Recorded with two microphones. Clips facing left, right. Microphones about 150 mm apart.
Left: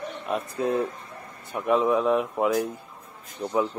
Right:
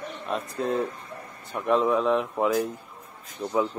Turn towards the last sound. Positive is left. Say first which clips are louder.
# even
turn(degrees=10)  # may be behind; listen again after turning